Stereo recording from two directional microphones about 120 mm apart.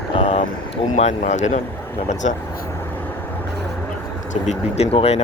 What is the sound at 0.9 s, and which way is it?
Speech, 75° left (ahead or behind).